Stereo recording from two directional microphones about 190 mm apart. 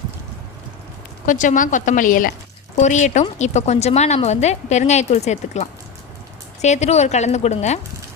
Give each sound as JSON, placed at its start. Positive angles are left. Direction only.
{"t": 1.2, "sound": "a woman's voice", "side_deg": 40}